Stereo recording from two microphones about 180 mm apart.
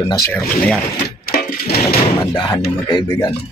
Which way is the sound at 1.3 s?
55° left (ahead or behind).